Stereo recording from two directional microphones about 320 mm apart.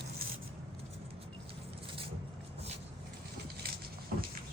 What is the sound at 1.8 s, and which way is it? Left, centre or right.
Vehicle, centre.